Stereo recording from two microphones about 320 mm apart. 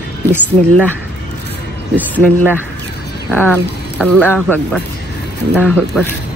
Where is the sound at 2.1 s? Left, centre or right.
Centre.